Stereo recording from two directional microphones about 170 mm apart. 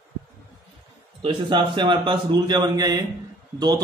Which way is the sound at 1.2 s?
30° right (ahead or behind).